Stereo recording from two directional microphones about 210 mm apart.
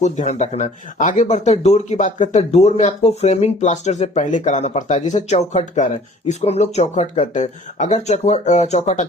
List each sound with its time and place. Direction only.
0.0 s speech: 35° left (ahead or behind)